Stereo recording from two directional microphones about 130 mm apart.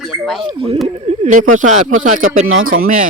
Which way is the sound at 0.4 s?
45° right (ahead or behind).